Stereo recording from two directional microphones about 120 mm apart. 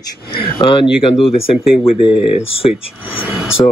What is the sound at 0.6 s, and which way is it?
Speech, 50° left (ahead or behind).